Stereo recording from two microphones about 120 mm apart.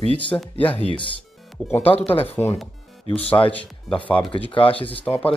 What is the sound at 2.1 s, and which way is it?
Speech, 55° left (ahead or behind).